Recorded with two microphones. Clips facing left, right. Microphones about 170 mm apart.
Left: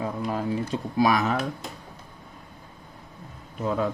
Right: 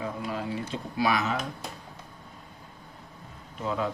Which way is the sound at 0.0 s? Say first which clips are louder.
Left 4 dB; 35° left (ahead or behind).